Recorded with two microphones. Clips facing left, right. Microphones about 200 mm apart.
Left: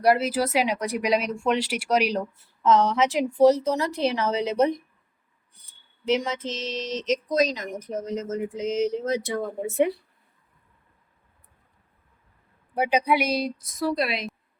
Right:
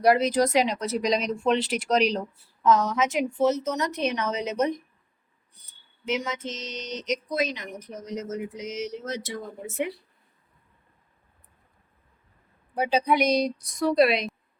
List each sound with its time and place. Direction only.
0.0 s speech: 5° left (ahead or behind)
2.6 s a woman's voice: 30° left (ahead or behind)
5.6 s a sound: 35° left (ahead or behind)
6.5 s music: 90° left
7.3 s speech: 40° left (ahead or behind)
8.5 s a sound: 30° left (ahead or behind)
12.7 s a woman's voice: 25° left (ahead or behind)
13.0 s a woman's voice: 5° left (ahead or behind)